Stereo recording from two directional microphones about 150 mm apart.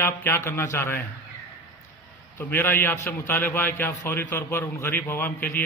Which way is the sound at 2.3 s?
15° left (ahead or behind).